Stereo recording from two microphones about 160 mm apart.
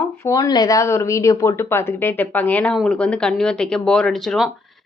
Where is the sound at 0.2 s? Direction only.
20° left (ahead or behind).